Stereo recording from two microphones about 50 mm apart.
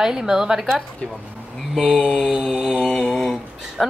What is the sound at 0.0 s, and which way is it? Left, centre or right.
Speech, centre.